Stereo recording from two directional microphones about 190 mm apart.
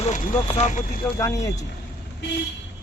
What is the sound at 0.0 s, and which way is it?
Speech, 35° left (ahead or behind).